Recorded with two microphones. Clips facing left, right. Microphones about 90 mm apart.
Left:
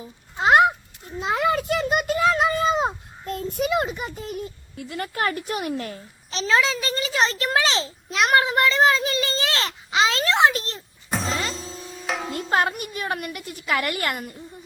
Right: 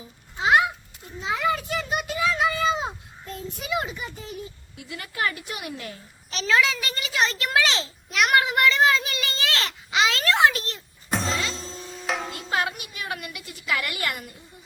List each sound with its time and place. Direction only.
0.3 s a sound: 45° left (ahead or behind)
4.8 s a woman's voice: 45° left (ahead or behind)
6.3 s a child's voice: 30° left (ahead or behind)
11.1 s music: centre (ahead or behind)
12.3 s a woman's voice: 45° left (ahead or behind)